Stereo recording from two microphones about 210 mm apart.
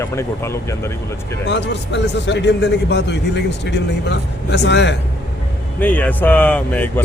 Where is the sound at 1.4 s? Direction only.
55° left (ahead or behind).